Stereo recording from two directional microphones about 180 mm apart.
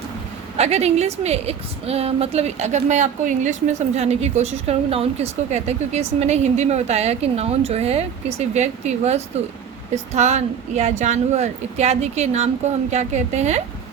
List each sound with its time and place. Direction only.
0.5 s a woman's voice: 35° right (ahead or behind)